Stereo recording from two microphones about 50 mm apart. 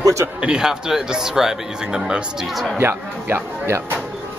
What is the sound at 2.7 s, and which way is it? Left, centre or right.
Speech, right.